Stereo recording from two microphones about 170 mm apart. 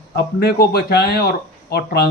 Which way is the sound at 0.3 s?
70° left (ahead or behind).